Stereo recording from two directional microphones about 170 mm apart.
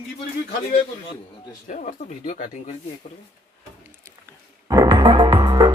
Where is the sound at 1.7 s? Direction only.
50° left (ahead or behind).